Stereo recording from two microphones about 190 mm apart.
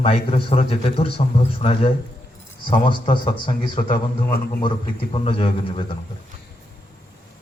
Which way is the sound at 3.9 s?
50° left (ahead or behind).